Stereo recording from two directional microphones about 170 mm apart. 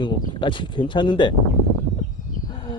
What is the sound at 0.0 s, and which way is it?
Speech, 30° left (ahead or behind).